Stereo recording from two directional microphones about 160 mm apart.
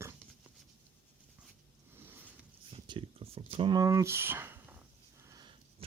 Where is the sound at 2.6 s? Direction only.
30° right (ahead or behind); by 4.8 s 10° right (ahead or behind).